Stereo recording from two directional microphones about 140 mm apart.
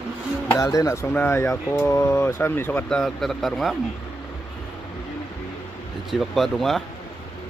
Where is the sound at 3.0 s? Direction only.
Centre (ahead or behind).